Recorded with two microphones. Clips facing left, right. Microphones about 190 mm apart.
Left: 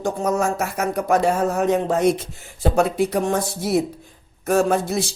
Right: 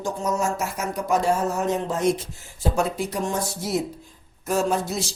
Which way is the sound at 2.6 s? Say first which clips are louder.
Left 6 dB; 65° left (ahead or behind).